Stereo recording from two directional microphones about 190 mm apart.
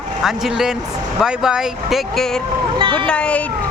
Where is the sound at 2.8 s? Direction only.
25° right (ahead or behind).